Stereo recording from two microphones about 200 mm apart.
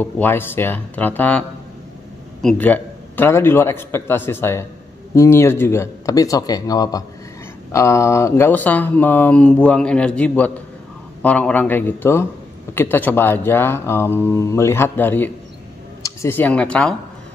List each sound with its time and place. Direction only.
0.0 s speech: 10° left (ahead or behind)
2.4 s speech: 5° left (ahead or behind)